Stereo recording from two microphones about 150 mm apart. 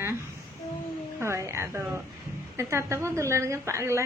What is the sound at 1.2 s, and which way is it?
A woman's voice, 20° right (ahead or behind).